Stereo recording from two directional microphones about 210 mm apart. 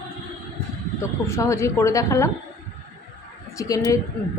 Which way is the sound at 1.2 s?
15° left (ahead or behind).